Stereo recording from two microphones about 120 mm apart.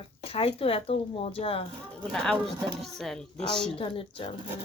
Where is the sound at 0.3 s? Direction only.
50° left (ahead or behind).